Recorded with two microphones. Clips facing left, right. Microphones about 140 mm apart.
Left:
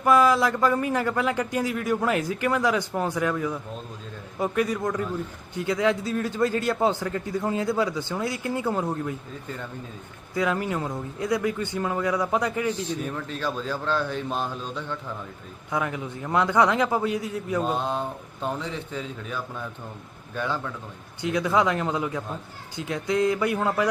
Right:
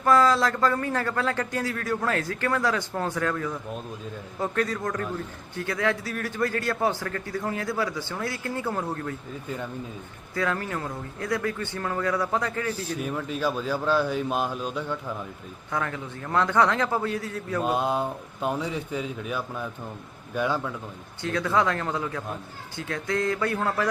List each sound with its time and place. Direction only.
0.0 s a man's voice: 15° left (ahead or behind)
10.3 s a man's voice: 15° left (ahead or behind)
13.0 s speech: 10° right (ahead or behind)
15.7 s a man's voice: 15° left (ahead or behind)
17.6 s speech: 10° right (ahead or behind)
21.2 s a man's voice: 15° left (ahead or behind)